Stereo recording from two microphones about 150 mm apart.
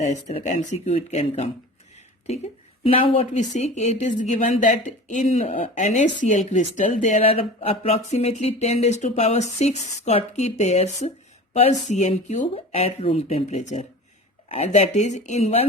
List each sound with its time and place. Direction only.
0.0 s a woman's voice: 50° left (ahead or behind)
7.3 s a woman's voice: 40° left (ahead or behind)